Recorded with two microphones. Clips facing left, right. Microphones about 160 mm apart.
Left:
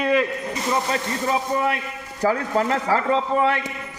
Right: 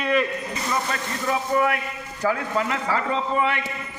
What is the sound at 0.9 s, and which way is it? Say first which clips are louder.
Speech: left 3 dB; 25° left (ahead or behind).